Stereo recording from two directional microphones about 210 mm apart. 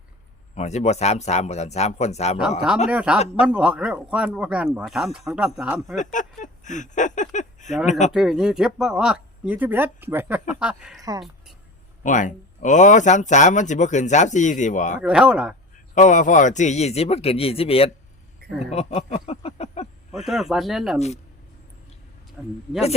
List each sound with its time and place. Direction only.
0.5 s speech: 30° left (ahead or behind)
2.9 s speech: 5° right (ahead or behind)
6.0 s speech: 35° left (ahead or behind)
8.1 s speech: centre (ahead or behind)
12.0 s speech: 35° left (ahead or behind)
15.0 s speech: 5° right (ahead or behind)
16.0 s speech: 35° left (ahead or behind)
20.1 s speech: centre (ahead or behind)
22.4 s speech: 5° right (ahead or behind)